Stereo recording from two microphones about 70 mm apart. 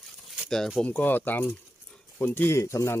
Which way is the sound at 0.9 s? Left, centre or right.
Left.